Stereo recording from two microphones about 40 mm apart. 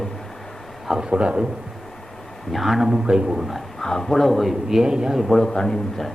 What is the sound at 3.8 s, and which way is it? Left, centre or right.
A man's voice, centre.